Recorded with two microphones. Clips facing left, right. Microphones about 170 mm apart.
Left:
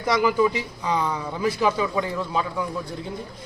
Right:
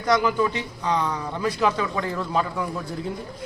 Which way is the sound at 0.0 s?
5° left (ahead or behind).